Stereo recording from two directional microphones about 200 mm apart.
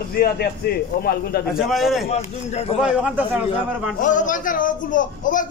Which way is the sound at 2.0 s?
30° left (ahead or behind).